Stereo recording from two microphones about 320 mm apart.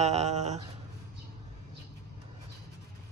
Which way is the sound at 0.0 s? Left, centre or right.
Right.